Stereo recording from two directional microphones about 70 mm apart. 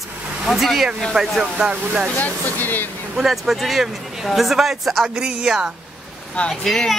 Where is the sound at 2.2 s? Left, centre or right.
Left.